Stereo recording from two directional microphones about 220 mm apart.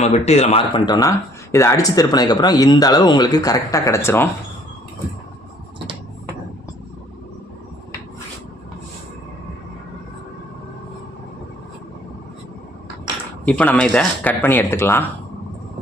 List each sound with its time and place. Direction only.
0.0 s speech: 30° left (ahead or behind); by 4.3 s 10° left (ahead or behind)
13.4 s speech: 5° left (ahead or behind)